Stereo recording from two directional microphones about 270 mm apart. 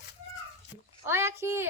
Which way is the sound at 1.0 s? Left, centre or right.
Centre.